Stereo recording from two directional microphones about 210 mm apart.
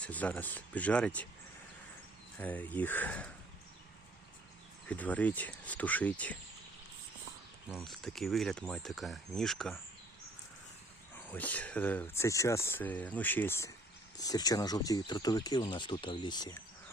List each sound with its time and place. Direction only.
0.0 s speech: 5° left (ahead or behind)
2.4 s speech: 10° left (ahead or behind)
4.9 s speech: 5° left (ahead or behind)
7.7 s speech: centre (ahead or behind)
11.1 s speech: 5° left (ahead or behind)